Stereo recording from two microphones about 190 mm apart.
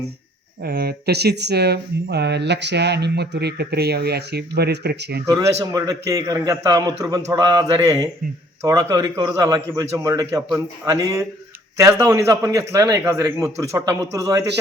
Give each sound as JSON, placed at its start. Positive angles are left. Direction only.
{"t": 0.6, "sound": "speech", "side_deg": -55}
{"t": 5.2, "sound": "a man's voice", "side_deg": -15}